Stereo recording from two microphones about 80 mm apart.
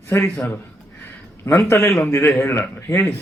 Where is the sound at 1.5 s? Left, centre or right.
Left.